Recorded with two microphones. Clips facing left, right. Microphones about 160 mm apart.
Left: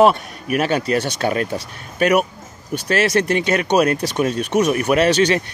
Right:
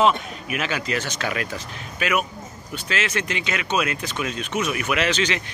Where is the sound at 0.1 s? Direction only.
45° left (ahead or behind).